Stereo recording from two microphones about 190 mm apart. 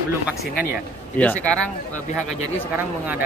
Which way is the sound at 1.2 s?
5° left (ahead or behind).